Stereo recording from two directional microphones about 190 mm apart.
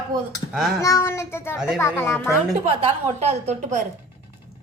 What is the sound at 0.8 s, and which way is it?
A child's voice, 15° left (ahead or behind).